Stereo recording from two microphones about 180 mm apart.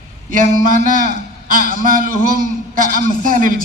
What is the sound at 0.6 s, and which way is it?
A man's voice, 50° right (ahead or behind).